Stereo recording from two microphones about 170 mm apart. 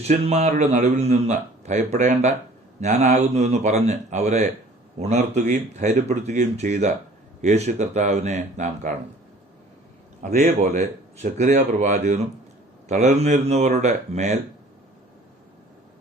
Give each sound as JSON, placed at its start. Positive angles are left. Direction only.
{"t": 0.1, "sound": "a man's voice", "side_deg": -40}
{"t": 10.2, "sound": "speech", "side_deg": -45}